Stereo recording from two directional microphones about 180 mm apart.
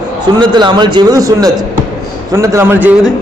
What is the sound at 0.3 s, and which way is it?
A man's voice, 25° right (ahead or behind).